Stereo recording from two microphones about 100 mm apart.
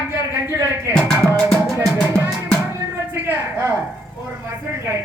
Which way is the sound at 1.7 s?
30° right (ahead or behind).